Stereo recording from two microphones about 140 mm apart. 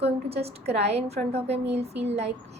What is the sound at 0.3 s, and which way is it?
A woman's voice, 45° right (ahead or behind).